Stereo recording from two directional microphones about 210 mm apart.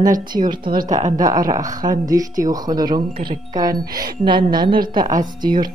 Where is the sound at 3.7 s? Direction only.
45° right (ahead or behind).